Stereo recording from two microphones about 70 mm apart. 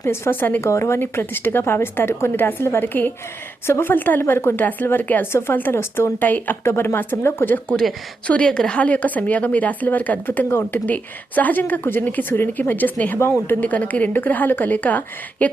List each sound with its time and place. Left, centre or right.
0.0 s a woman's voice: left
0.6 s a woman's voice: left
8.3 s a woman's voice: centre